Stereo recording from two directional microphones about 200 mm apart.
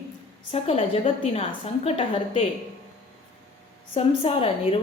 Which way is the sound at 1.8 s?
30° left (ahead or behind).